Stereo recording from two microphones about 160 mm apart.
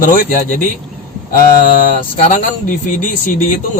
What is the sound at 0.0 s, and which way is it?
A man's voice, 60° left (ahead or behind).